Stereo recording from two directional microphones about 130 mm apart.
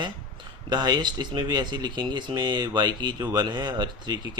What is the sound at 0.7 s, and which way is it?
Speech, 30° right (ahead or behind).